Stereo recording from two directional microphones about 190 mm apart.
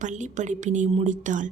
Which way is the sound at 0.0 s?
40° right (ahead or behind).